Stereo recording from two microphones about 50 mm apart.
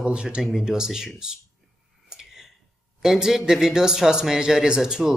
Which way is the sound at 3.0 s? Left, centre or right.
Centre.